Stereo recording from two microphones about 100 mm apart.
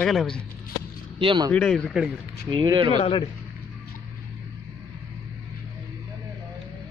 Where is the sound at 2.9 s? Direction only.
90° left.